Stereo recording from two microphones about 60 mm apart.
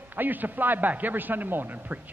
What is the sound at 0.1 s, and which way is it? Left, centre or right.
A man's voice, right.